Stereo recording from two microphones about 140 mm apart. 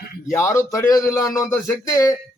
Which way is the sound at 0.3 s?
20° left (ahead or behind).